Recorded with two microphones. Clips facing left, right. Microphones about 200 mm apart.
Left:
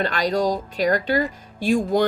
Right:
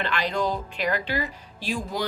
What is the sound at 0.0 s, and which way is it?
Speech, 40° left (ahead or behind).